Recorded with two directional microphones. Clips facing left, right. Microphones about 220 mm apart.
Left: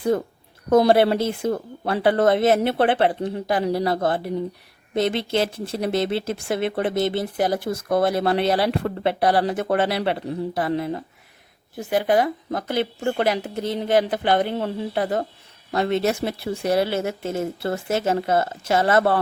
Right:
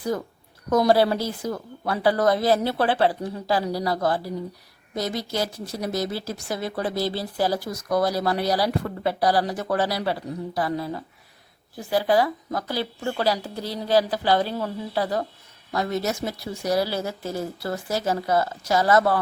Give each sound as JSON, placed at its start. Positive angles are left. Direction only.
{"t": 0.0, "sound": "speech", "side_deg": 25}